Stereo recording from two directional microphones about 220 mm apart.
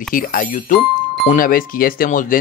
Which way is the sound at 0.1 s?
40° left (ahead or behind).